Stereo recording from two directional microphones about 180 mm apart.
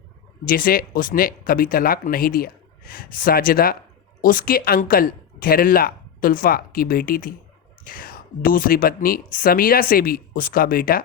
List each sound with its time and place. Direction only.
0.4 s speech: 55° left (ahead or behind)